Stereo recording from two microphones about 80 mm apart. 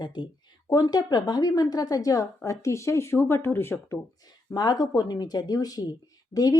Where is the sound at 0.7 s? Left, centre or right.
Left.